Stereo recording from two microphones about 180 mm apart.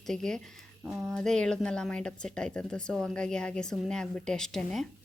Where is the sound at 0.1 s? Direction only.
5° left (ahead or behind).